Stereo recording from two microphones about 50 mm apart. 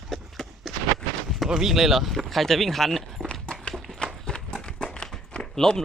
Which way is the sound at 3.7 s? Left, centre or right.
Centre.